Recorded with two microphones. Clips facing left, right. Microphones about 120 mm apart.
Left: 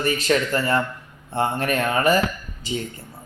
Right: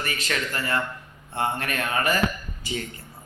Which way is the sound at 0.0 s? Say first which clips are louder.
Left 9 dB; 30° left (ahead or behind).